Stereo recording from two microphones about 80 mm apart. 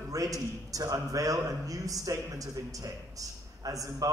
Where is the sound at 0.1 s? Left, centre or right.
Right.